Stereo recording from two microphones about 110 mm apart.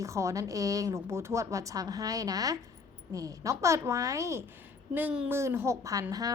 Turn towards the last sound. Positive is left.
turn(degrees=-30)  # may be behind; listen again after turning